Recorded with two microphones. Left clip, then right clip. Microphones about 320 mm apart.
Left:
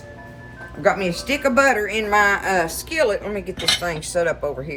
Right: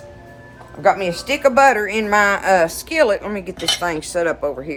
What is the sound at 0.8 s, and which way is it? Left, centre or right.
Speech, centre.